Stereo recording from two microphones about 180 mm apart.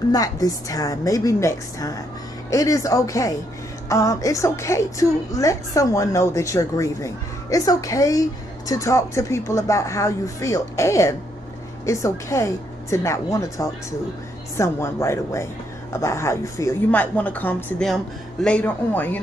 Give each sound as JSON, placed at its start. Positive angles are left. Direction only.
{"t": 0.1, "sound": "a woman's voice", "side_deg": 20}